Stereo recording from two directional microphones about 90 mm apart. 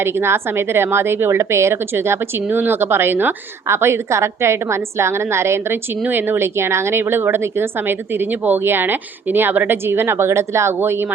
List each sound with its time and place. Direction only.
0.0 s a woman's voice: 25° right (ahead or behind)